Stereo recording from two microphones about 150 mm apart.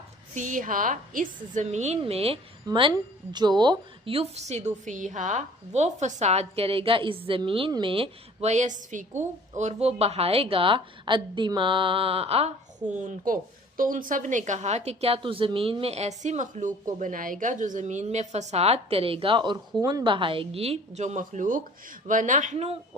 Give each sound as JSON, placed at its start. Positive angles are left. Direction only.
{"t": 0.3, "sound": "a woman's voice", "side_deg": -60}
{"t": 13.0, "sound": "a woman's voice", "side_deg": -60}
{"t": 22.5, "sound": "a woman's voice", "side_deg": -40}